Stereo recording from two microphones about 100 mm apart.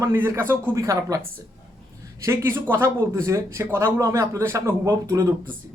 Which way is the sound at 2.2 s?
25° right (ahead or behind).